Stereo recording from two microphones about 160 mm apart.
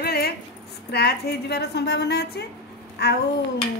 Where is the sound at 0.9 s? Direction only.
90° left.